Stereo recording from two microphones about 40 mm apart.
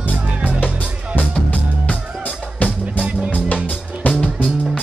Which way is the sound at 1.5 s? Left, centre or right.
Left.